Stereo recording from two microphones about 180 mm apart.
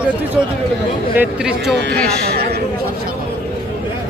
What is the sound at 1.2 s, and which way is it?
Speech, 5° right (ahead or behind).